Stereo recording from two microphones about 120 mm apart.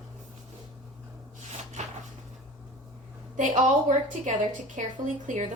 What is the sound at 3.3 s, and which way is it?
A woman's voice, 90° right.